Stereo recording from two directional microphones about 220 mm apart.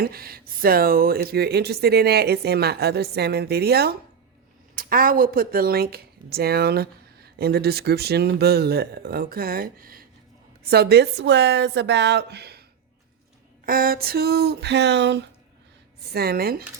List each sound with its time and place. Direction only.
0.0 s speech: 40° right (ahead or behind)
13.7 s speech: 40° right (ahead or behind)